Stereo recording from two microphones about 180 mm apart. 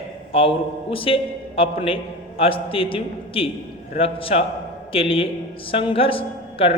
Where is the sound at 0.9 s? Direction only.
30° left (ahead or behind).